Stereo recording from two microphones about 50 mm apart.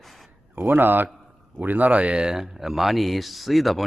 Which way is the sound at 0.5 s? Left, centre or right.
Right.